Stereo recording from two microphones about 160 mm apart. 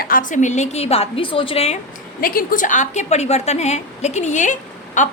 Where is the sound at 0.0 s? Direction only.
60° left (ahead or behind); by 1.8 s 40° left (ahead or behind).